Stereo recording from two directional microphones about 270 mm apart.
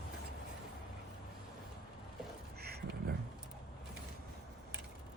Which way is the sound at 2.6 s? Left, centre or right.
Right.